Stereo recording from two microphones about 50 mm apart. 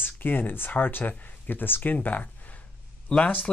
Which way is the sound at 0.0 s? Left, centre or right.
Left.